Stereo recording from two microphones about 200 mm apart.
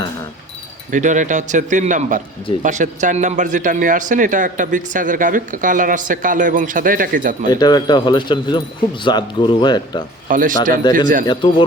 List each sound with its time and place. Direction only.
0.9 s speech: 40° right (ahead or behind)
7.5 s speech: 20° left (ahead or behind)
10.2 s speech: 40° right (ahead or behind)